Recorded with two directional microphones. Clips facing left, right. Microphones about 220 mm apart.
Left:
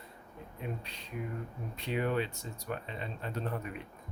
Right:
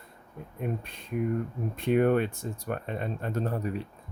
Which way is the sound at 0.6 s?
50° right (ahead or behind).